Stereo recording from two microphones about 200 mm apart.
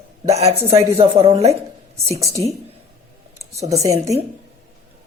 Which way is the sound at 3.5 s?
35° right (ahead or behind).